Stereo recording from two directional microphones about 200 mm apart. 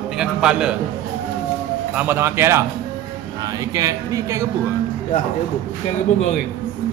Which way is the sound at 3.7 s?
15° right (ahead or behind).